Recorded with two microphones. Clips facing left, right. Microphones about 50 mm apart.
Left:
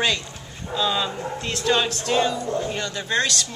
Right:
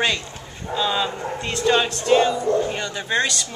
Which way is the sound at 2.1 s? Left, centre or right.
Centre.